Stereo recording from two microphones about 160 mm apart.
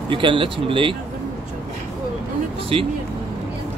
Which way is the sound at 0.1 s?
30° right (ahead or behind).